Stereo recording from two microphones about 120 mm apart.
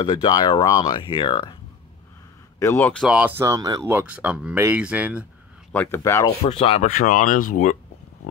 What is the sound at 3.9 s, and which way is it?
Speech, 15° right (ahead or behind).